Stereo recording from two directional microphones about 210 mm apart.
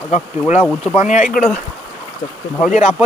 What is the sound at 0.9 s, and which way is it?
Speech, 35° left (ahead or behind).